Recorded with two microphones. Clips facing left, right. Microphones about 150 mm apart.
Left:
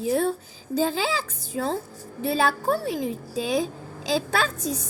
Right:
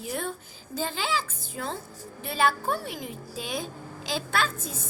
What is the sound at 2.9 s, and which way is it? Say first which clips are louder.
Speech: left 9 dB; 35° left (ahead or behind).